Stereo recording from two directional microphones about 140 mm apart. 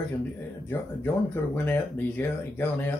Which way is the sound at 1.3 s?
15° left (ahead or behind).